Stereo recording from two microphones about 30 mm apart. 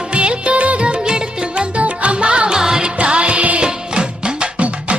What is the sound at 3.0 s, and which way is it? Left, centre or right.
Music, right.